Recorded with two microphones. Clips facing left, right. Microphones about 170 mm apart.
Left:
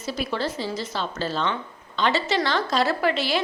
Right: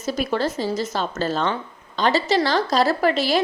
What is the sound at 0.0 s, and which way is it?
A woman's voice, 45° right (ahead or behind).